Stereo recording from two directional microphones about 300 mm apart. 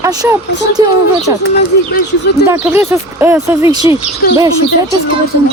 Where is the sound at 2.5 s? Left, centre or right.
Centre.